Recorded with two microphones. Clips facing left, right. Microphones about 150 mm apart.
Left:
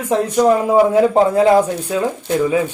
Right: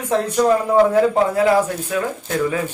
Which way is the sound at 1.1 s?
25° left (ahead or behind).